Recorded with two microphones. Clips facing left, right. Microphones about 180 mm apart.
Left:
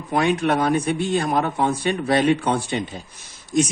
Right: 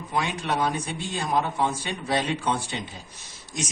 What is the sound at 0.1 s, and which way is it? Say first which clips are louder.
A man's voice: left 8 dB; 60° left (ahead or behind).